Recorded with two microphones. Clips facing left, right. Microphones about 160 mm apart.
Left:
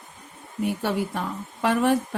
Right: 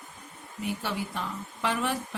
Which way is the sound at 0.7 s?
50° left (ahead or behind).